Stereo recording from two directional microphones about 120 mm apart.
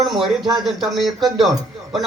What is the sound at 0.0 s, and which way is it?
Speech, centre (ahead or behind).